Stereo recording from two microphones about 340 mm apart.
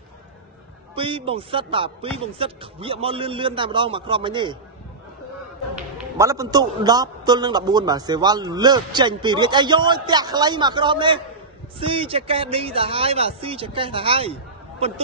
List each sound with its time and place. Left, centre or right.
0.9 s a man's voice: centre
5.8 s a man's voice: centre